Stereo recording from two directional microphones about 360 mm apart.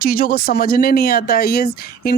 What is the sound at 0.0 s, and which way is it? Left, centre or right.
Speech, left.